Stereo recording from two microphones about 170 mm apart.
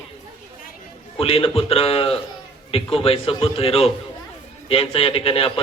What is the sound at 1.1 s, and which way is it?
A man's voice, 35° left (ahead or behind).